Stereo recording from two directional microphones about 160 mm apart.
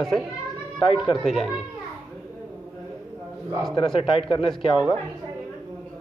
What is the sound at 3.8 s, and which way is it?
Speech, 35° left (ahead or behind).